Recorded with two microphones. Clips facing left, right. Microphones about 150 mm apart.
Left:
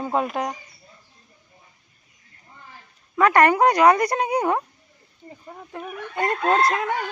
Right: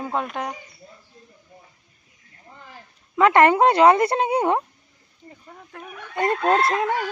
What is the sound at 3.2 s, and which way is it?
Speech, 20° right (ahead or behind).